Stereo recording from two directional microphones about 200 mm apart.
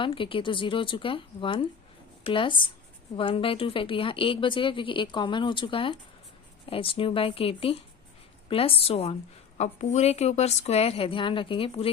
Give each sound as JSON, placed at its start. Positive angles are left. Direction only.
{"t": 0.0, "sound": "a woman's voice", "side_deg": 25}